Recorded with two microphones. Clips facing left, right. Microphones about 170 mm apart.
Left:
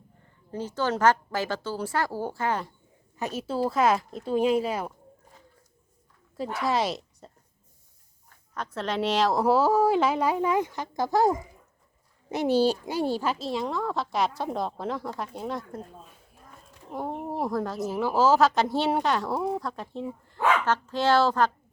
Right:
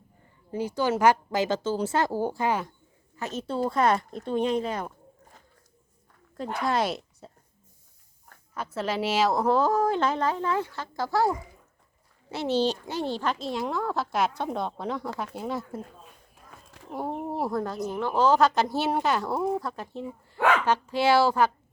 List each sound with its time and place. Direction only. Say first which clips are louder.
0.5 s a woman's voice: right 2 dB; 10° right (ahead or behind)
3.2 s speech: left 1 dB; 10° left (ahead or behind)
6.3 s speech: even; 5° left (ahead or behind)
8.5 s speech: even; 5° right (ahead or behind)
9.4 s speech: left 2 dB; 5° left (ahead or behind)
16.9 s a woman's voice: right 1 dB; 5° right (ahead or behind)